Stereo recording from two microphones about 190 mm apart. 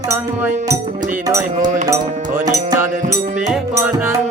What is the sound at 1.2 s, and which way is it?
Speech, 20° right (ahead or behind).